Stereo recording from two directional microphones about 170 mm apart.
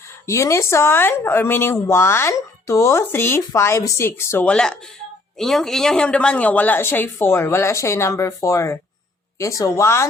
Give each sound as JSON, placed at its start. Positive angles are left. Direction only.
{"t": 0.3, "sound": "speech", "side_deg": 20}